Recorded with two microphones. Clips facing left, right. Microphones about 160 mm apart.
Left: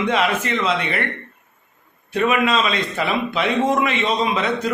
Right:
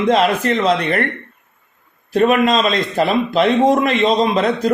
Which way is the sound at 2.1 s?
40° right (ahead or behind).